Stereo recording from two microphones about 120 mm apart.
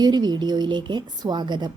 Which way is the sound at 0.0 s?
35° right (ahead or behind).